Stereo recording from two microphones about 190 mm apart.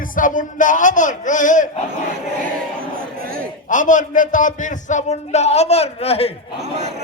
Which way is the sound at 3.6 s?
40° left (ahead or behind).